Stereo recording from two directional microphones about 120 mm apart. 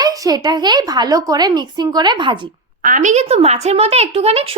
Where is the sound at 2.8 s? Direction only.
90° right; by 4.6 s 55° right (ahead or behind).